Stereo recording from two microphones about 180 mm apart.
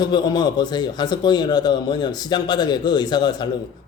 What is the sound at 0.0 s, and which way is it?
A man's voice, 25° left (ahead or behind).